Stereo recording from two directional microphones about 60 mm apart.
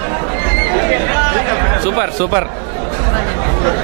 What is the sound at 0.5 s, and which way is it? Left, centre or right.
Chatter, right.